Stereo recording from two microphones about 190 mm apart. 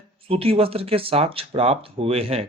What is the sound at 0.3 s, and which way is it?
Speech, 30° right (ahead or behind).